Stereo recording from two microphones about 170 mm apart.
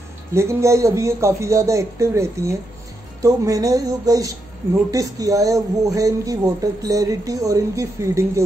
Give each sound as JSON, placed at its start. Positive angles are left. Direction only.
{"t": 0.3, "sound": "speech", "side_deg": -15}